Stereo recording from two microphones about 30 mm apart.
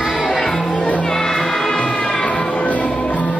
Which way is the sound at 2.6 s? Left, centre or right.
Left.